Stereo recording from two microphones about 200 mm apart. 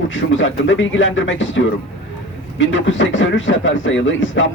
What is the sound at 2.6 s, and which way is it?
Speech, 70° left (ahead or behind).